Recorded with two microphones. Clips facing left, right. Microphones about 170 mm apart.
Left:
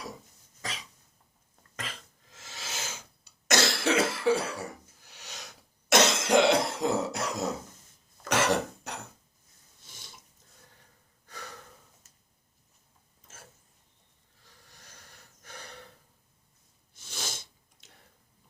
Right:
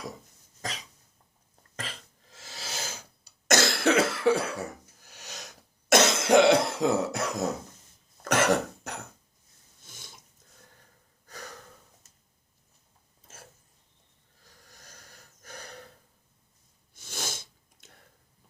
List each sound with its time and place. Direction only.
0.6 s cough: 40° right (ahead or behind)
5.0 s cough: 45° right (ahead or behind)
6.2 s cough: 60° right (ahead or behind)
9.8 s a sound: 50° right (ahead or behind)
11.3 s gasp: 40° right (ahead or behind)
14.4 s snort: 45° right (ahead or behind)
16.9 s sneeze: 50° right (ahead or behind)